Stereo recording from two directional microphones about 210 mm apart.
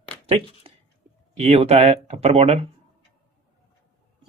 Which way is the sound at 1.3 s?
30° right (ahead or behind).